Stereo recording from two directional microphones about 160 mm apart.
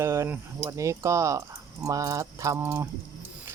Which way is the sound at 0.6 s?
20° right (ahead or behind).